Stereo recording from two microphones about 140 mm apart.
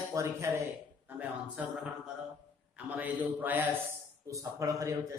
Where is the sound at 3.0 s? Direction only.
10° right (ahead or behind).